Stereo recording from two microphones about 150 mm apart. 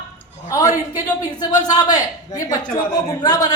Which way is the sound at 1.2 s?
25° left (ahead or behind).